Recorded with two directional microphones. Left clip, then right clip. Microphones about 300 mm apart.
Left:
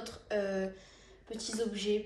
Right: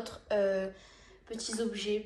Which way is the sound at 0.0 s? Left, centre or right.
Centre.